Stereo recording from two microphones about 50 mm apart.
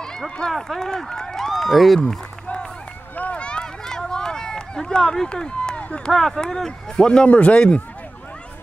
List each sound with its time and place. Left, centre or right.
0.0 s speech: centre
2.0 s a sound: centre
3.2 s run: left
6.0 s speech: centre